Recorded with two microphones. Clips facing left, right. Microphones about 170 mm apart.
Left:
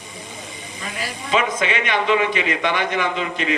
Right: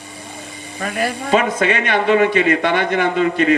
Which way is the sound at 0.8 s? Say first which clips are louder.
Right 10 dB; 60° right (ahead or behind).